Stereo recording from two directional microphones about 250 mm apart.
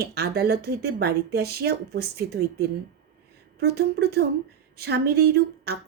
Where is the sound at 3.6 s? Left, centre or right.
Right.